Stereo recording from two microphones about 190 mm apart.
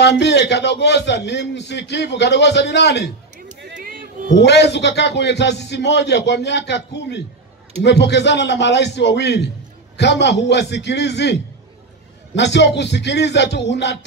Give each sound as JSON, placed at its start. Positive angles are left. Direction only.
{"t": 0.0, "sound": "a man's voice", "side_deg": 65}
{"t": 3.7, "sound": "a sound", "side_deg": -50}
{"t": 4.3, "sound": "a man's voice", "side_deg": 65}
{"t": 12.4, "sound": "a man's voice", "side_deg": 65}